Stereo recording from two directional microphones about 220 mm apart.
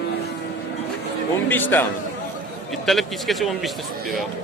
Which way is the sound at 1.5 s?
10° left (ahead or behind).